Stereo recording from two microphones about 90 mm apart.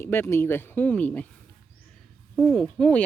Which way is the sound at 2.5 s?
5° left (ahead or behind).